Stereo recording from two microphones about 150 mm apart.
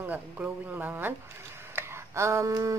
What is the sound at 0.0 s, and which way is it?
Speech, 10° right (ahead or behind).